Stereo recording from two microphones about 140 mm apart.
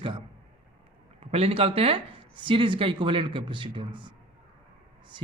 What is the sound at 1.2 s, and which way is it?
Speech, 45° right (ahead or behind).